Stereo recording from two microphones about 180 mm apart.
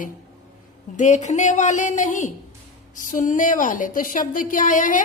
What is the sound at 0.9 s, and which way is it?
Speech, 40° left (ahead or behind).